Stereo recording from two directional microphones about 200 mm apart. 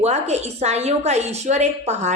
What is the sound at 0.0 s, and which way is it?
A woman's voice, 35° right (ahead or behind).